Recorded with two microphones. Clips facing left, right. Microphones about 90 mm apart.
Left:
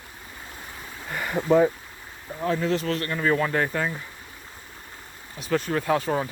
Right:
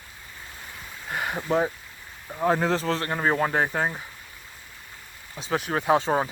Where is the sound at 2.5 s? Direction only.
35° right (ahead or behind).